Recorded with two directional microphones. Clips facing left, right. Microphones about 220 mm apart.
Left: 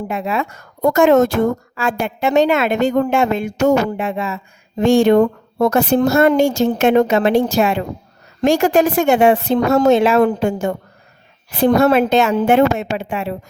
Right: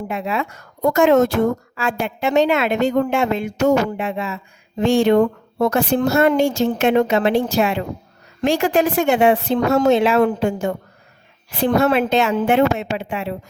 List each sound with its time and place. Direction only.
0.1 s a woman's voice: 45° left (ahead or behind)